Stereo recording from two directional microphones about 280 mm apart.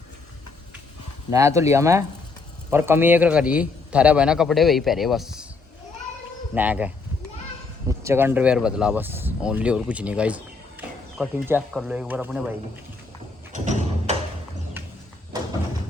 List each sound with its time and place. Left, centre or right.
1.3 s a man's voice: centre
6.5 s a man's voice: centre
14.1 s a sound: right